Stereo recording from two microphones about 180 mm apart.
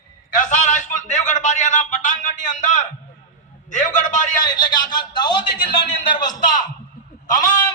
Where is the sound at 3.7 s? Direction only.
45° left (ahead or behind).